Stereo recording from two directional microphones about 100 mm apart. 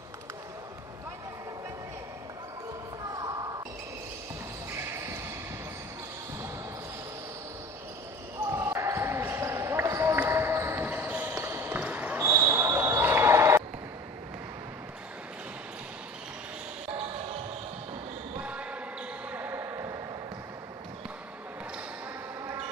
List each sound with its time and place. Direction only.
3.1 s basketball bounce: 40° right (ahead or behind)
4.7 s basketball bounce: 25° right (ahead or behind)
8.5 s basketball bounce: 30° right (ahead or behind)
18.4 s basketball bounce: 10° right (ahead or behind); by 20.0 s 25° right (ahead or behind)